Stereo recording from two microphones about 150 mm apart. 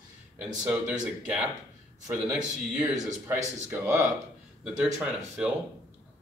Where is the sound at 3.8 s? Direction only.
20° right (ahead or behind).